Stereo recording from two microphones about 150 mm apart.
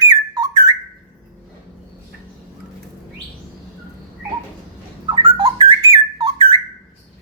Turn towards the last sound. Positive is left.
turn(degrees=-30)  # may be behind; listen again after turning